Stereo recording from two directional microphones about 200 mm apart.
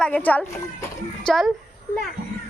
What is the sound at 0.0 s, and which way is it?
A child's voice, 5° left (ahead or behind).